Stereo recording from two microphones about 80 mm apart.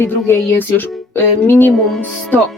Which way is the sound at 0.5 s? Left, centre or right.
Left.